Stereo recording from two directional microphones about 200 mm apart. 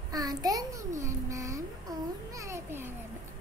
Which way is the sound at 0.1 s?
20° right (ahead or behind).